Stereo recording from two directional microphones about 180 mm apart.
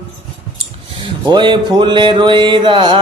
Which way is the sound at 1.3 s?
25° right (ahead or behind).